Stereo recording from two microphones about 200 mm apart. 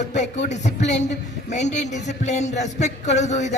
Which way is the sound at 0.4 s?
35° left (ahead or behind).